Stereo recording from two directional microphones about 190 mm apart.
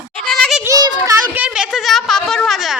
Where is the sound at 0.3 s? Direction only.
Centre (ahead or behind).